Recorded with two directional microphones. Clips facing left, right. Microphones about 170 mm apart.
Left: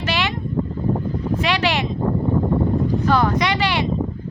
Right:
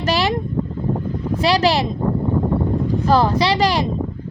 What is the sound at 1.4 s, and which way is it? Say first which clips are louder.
Speech: right 6 dB; 35° right (ahead or behind).